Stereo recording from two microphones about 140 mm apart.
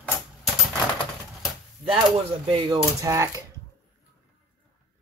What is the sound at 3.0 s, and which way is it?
Speech, 20° right (ahead or behind).